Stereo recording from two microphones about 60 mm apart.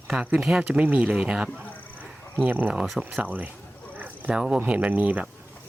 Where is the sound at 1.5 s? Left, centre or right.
Right.